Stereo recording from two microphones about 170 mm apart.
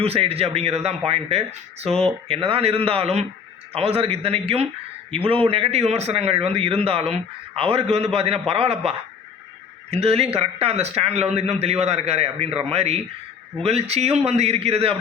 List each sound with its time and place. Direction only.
0.0 s a man's voice: 35° right (ahead or behind)